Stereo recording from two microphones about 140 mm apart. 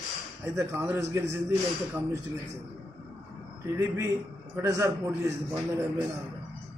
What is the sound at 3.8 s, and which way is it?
A man's voice, 20° right (ahead or behind).